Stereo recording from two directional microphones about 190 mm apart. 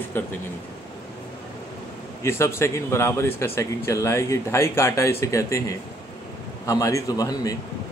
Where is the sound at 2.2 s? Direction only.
15° left (ahead or behind).